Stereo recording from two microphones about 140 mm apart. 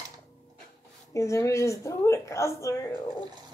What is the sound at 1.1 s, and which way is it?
A woman's voice, 20° left (ahead or behind).